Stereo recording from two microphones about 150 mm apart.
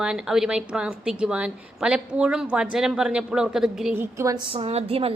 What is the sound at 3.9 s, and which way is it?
Speech, 20° right (ahead or behind).